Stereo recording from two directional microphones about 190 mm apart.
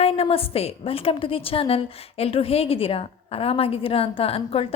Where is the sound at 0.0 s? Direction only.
30° left (ahead or behind).